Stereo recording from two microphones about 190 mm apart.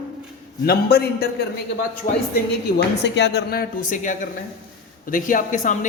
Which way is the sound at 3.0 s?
65° left (ahead or behind).